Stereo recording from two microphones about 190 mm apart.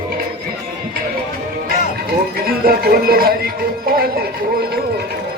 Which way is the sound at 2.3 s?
50° right (ahead or behind).